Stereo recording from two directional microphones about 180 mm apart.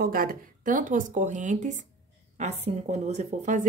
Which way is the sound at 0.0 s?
50° right (ahead or behind).